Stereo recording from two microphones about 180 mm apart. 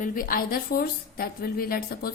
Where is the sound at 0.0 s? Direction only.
50° left (ahead or behind).